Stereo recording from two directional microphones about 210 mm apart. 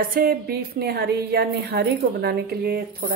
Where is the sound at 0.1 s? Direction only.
45° right (ahead or behind).